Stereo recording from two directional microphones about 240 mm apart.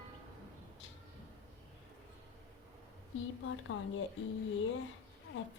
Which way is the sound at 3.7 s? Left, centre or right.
Left.